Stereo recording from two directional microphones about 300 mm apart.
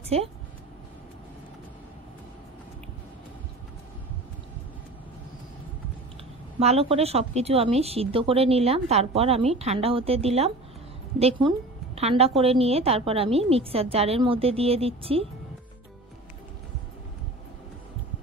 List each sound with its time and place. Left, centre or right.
0.1 s a woman's voice: centre
6.6 s a woman's voice: centre